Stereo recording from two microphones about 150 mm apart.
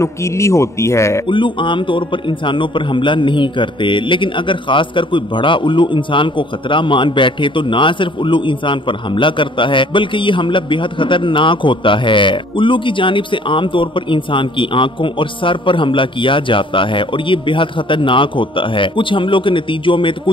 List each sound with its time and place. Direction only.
0.0 s a man's voice: 20° left (ahead or behind)
1.2 s a man's voice: 35° left (ahead or behind)